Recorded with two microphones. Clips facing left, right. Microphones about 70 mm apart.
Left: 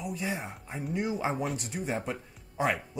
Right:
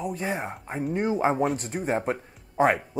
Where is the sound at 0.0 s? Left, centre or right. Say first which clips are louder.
Right 5 dB; right.